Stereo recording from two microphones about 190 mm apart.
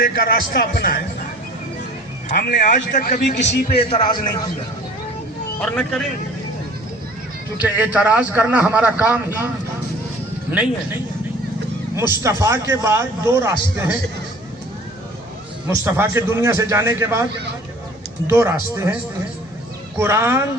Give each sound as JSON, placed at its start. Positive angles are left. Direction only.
{"t": 0.0, "sound": "a man's voice", "side_deg": 50}
{"t": 2.3, "sound": "a man's voice", "side_deg": 45}
{"t": 5.5, "sound": "speech", "side_deg": 5}
{"t": 7.6, "sound": "a man's voice", "side_deg": -5}
{"t": 11.9, "sound": "a man's voice", "side_deg": -15}
{"t": 15.7, "sound": "a man's voice", "side_deg": -15}
{"t": 18.3, "sound": "a man's voice", "side_deg": -15}
{"t": 20.0, "sound": "a man's voice", "side_deg": -15}